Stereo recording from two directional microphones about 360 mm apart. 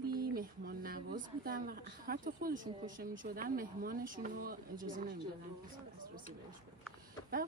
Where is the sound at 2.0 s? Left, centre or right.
Right.